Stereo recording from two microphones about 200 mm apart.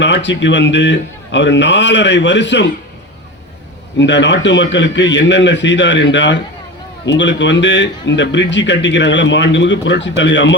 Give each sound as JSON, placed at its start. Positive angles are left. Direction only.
{"t": 0.0, "sound": "a man's voice", "side_deg": 60}
{"t": 3.9, "sound": "a man's voice", "side_deg": 65}